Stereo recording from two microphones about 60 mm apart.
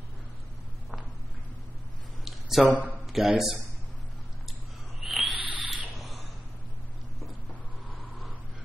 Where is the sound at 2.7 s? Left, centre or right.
Right.